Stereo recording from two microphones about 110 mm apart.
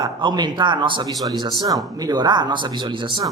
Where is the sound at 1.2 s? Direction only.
35° right (ahead or behind).